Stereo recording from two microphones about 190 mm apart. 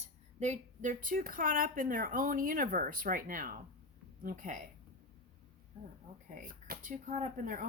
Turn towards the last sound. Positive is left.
turn(degrees=-45)  # may be behind; listen again after turning